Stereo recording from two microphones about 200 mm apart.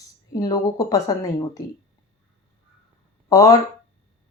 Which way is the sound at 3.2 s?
15° left (ahead or behind).